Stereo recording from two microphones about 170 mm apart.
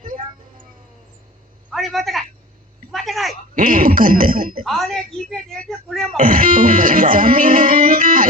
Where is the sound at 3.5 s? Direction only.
55° right (ahead or behind).